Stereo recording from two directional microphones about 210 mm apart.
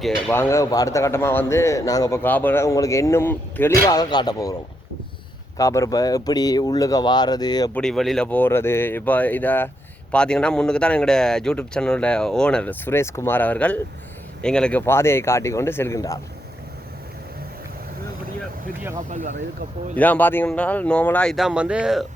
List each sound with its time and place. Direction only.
0.3 s speech: 10° left (ahead or behind)
5.5 s speech: 15° left (ahead or behind)
7.7 s speech: 5° left (ahead or behind)
19.1 s speech: 35° right (ahead or behind)
20.0 s speech: 10° left (ahead or behind)